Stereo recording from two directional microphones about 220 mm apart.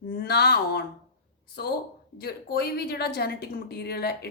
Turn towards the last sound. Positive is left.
turn(degrees=45)  # may be behind; listen again after turning